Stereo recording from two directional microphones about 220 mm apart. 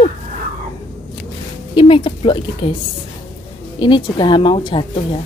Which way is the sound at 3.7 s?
20° left (ahead or behind).